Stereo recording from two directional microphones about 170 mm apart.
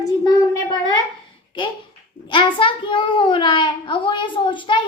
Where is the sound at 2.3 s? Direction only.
30° left (ahead or behind).